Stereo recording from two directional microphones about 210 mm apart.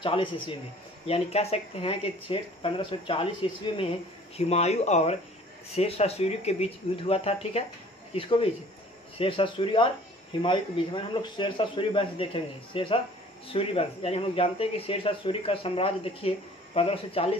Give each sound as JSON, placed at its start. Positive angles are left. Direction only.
{"t": 0.0, "sound": "speech", "side_deg": 25}
{"t": 4.4, "sound": "speech", "side_deg": 30}